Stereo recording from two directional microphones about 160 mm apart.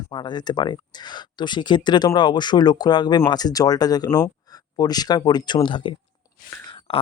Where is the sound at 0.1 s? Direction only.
25° left (ahead or behind).